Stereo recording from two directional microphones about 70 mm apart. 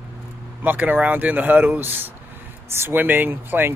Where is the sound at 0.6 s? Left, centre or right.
Right.